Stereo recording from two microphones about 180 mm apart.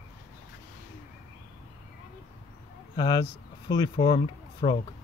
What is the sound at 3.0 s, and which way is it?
Speech, 25° left (ahead or behind).